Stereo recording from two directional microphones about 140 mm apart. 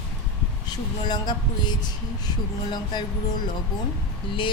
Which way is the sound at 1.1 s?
30° left (ahead or behind).